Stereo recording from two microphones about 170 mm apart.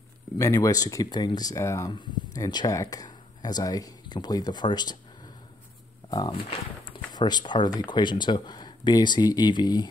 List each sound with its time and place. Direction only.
0.4 s speech: 20° left (ahead or behind)
6.0 s speech: 25° left (ahead or behind)